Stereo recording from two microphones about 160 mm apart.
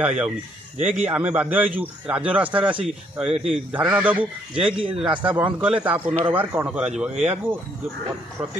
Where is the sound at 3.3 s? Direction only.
40° right (ahead or behind).